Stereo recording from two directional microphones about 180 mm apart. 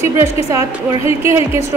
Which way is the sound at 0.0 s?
15° right (ahead or behind).